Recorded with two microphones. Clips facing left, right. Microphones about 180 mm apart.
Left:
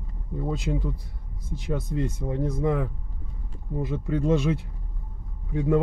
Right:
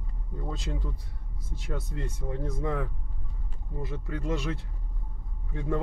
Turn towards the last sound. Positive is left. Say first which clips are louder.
# left 8 dB
turn(degrees=15)  # may be behind; listen again after turning